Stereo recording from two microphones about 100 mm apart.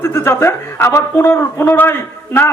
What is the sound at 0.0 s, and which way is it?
A man's voice, 25° left (ahead or behind).